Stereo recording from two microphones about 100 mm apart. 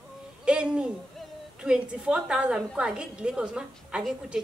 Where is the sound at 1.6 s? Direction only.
5° right (ahead or behind).